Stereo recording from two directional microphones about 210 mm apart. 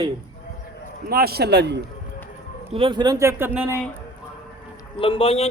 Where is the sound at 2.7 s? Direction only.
25° right (ahead or behind).